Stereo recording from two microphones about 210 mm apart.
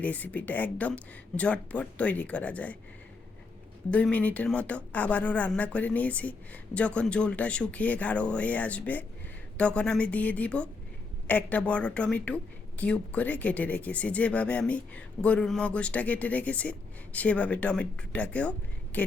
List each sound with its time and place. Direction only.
0.0 s speech: 5° left (ahead or behind)
3.9 s a woman's voice: 5° left (ahead or behind)